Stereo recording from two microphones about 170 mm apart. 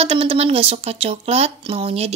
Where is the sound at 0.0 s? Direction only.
35° right (ahead or behind).